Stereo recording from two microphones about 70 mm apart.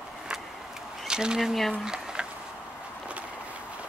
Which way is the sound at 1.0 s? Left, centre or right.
Centre.